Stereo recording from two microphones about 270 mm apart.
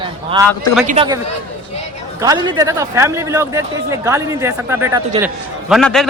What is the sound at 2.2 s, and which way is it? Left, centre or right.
Speech, centre.